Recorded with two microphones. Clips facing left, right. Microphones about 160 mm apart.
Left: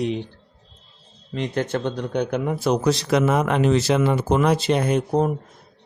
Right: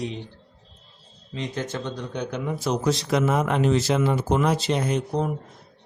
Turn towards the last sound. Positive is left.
turn(degrees=45)  # may be behind; listen again after turning